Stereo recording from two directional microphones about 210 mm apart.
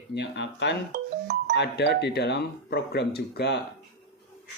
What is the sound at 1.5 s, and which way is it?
Speech, 55° left (ahead or behind).